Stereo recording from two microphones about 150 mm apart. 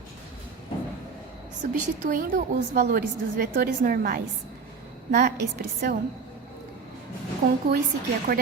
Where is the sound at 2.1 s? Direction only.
65° right (ahead or behind).